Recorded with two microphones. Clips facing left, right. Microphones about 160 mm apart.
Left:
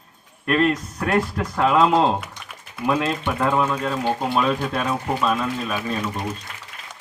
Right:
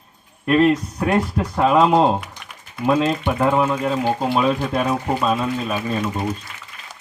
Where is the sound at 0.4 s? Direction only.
20° right (ahead or behind).